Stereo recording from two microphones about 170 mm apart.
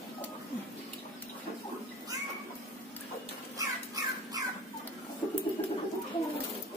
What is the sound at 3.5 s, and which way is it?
Bird, 20° right (ahead or behind).